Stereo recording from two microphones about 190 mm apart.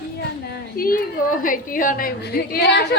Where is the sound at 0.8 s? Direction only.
50° left (ahead or behind).